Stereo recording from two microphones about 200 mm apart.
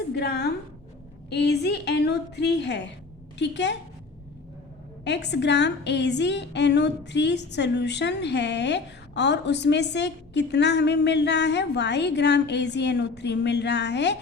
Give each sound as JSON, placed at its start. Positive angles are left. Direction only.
{"t": 0.1, "sound": "a sound", "side_deg": 55}
{"t": 1.3, "sound": "a woman's voice", "side_deg": 55}
{"t": 5.0, "sound": "a woman's voice", "side_deg": 60}